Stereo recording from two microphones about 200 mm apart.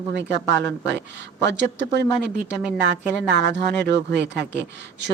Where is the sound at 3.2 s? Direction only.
60° right (ahead or behind).